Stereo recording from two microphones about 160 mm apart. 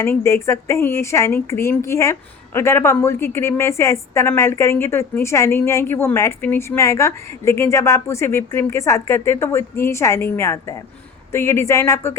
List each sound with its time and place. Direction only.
0.0 s speech: 15° left (ahead or behind)